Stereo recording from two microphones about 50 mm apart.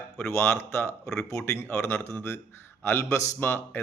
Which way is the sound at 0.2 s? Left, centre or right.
Left.